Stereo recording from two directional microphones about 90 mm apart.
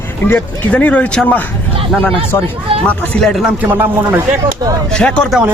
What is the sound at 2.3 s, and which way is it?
Speech, 35° left (ahead or behind).